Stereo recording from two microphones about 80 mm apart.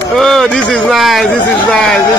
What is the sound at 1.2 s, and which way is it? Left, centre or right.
Speech, centre.